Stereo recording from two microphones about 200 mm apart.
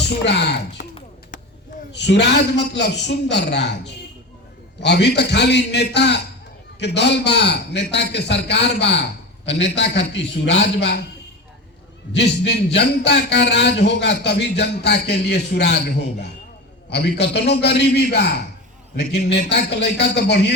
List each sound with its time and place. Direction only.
0.0 s a man's voice: 55° left (ahead or behind)
1.9 s a man's voice: 60° left (ahead or behind)
12.1 s a man's voice: 60° left (ahead or behind)